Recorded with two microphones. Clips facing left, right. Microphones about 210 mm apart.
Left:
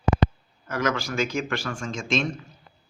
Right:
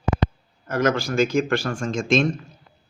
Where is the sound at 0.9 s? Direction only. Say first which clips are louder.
Right 6 dB; 30° right (ahead or behind).